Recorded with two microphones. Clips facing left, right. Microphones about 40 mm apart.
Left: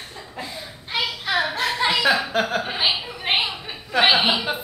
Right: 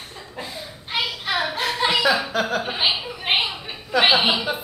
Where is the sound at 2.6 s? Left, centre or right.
Centre.